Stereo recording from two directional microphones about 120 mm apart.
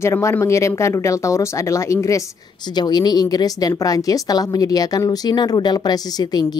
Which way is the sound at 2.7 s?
35° left (ahead or behind).